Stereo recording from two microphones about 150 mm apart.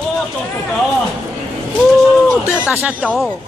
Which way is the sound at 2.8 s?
5° right (ahead or behind).